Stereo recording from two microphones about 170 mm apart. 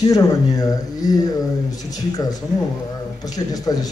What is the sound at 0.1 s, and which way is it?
A man's voice, 20° left (ahead or behind).